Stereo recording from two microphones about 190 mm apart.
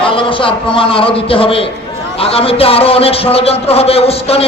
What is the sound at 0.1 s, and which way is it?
A man's voice, 25° left (ahead or behind).